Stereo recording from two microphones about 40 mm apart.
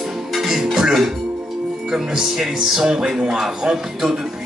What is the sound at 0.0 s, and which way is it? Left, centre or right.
Music, centre.